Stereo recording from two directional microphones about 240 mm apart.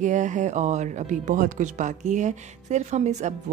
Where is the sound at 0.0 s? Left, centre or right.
Right.